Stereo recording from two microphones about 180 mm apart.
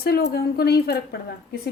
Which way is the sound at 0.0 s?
60° left (ahead or behind).